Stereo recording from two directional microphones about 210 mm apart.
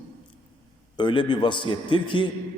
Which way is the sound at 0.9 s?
20° left (ahead or behind).